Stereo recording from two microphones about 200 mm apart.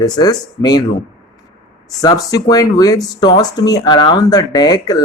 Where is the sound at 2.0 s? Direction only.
20° left (ahead or behind).